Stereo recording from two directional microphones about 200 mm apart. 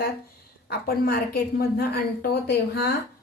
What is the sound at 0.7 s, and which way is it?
A woman's voice, 50° left (ahead or behind).